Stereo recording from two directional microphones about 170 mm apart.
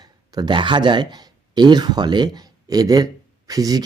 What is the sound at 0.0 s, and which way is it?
Speech, 25° right (ahead or behind).